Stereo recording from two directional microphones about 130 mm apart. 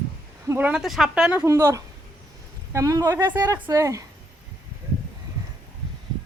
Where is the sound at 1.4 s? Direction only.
20° right (ahead or behind).